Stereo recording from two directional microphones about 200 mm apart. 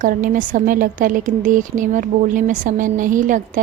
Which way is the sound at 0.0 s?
40° right (ahead or behind).